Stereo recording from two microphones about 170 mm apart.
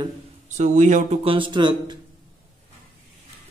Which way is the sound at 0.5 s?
45° right (ahead or behind).